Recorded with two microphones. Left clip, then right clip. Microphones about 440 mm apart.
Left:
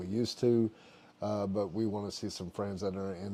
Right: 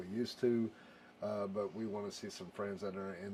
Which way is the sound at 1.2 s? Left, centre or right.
Left.